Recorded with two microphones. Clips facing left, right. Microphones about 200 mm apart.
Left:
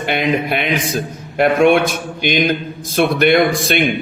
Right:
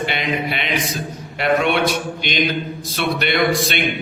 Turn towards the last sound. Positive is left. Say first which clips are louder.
# left 5 dB
turn(degrees=50)  # may be behind; listen again after turning